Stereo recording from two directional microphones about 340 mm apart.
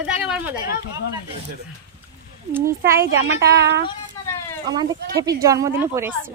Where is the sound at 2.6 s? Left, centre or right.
Right.